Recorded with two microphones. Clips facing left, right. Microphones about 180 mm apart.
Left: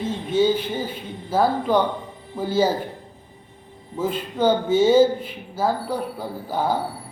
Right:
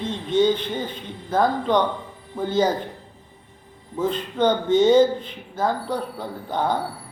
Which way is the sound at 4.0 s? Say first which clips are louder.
Even; 10° left (ahead or behind).